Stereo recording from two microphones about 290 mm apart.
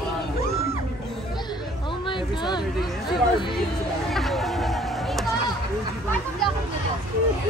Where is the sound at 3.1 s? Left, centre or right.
Centre.